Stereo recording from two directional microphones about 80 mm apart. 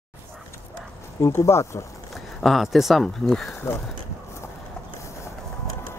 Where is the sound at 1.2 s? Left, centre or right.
Left.